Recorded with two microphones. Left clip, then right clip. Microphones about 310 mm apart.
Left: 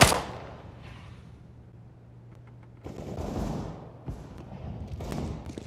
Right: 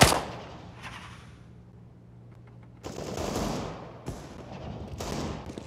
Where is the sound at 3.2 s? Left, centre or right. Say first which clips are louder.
Right 4 dB; right.